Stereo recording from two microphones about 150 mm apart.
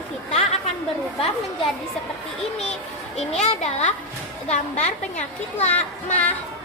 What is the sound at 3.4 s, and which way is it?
A woman's voice, 50° left (ahead or behind).